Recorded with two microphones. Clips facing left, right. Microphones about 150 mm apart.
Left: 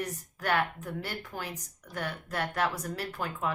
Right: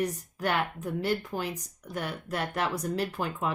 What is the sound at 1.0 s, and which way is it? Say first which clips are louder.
Speech: right 11 dB; 20° right (ahead or behind).